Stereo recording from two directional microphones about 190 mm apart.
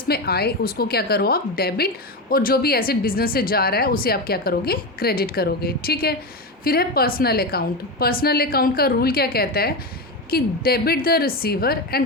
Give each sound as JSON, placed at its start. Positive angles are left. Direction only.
{"t": 0.1, "sound": "a woman's voice", "side_deg": 55}